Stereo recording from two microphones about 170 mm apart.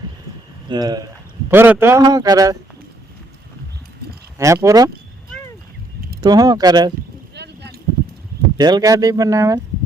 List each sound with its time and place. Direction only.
0.7 s a man's voice: 25° right (ahead or behind)
1.5 s a man's voice: 10° right (ahead or behind)
4.4 s speech: 15° right (ahead or behind)
6.1 s a man's voice: 20° right (ahead or behind)
7.3 s a sound: 80° right
8.5 s a man's voice: 25° right (ahead or behind)